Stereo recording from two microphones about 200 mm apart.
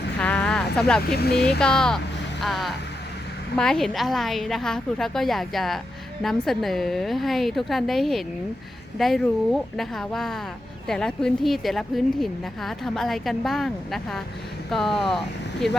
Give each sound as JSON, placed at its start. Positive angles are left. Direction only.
{"t": 0.2, "sound": "a sound", "side_deg": 5}
{"t": 1.1, "sound": "speech", "side_deg": 50}
{"t": 1.5, "sound": "a woman's voice", "side_deg": 5}